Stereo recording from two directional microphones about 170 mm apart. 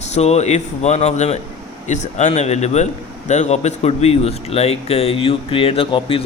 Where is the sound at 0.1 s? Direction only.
40° left (ahead or behind).